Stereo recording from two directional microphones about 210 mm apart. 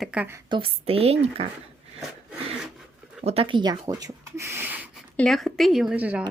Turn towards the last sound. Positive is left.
turn(degrees=-5)  # may be behind; listen again after turning